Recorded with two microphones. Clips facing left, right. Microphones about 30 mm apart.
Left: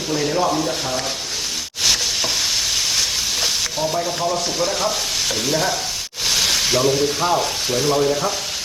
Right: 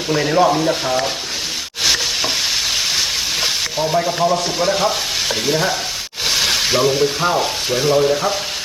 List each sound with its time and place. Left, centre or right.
0.1 s stir: right
1.8 s stir: centre
2.7 s frying: centre
3.9 s speech: right
4.5 s stir: right
6.2 s speech: centre